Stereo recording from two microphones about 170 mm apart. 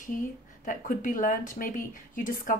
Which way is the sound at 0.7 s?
50° left (ahead or behind).